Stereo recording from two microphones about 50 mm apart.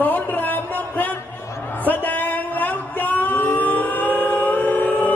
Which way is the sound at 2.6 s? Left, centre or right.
Left.